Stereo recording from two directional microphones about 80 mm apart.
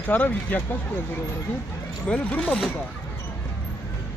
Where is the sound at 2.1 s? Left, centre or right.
Centre.